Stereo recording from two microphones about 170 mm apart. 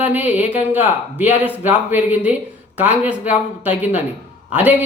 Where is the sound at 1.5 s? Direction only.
10° right (ahead or behind).